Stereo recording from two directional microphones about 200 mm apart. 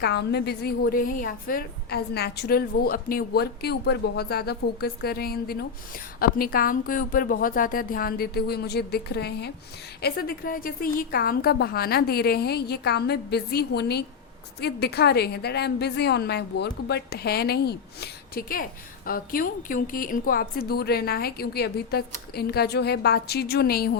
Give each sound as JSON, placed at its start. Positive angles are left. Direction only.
{"t": 0.0, "sound": "a woman's voice", "side_deg": 55}